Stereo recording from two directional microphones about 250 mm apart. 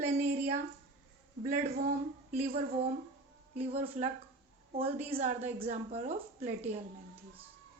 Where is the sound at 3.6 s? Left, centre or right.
Right.